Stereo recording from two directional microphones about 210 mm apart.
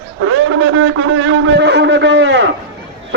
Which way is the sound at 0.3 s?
70° right (ahead or behind).